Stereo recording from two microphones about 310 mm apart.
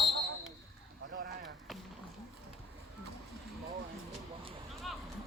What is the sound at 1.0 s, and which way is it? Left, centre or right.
Speech, right.